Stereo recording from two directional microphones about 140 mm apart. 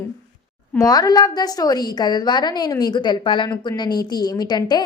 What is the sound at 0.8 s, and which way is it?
A woman's voice, 30° left (ahead or behind).